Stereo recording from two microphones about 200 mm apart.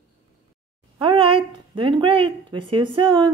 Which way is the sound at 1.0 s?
25° right (ahead or behind).